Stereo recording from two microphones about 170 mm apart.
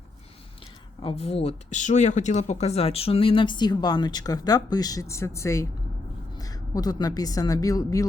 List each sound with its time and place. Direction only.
1.0 s a woman's voice: 40° left (ahead or behind); by 8.0 s 20° left (ahead or behind)